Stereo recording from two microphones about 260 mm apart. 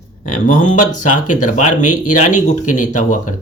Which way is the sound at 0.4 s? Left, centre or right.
Left.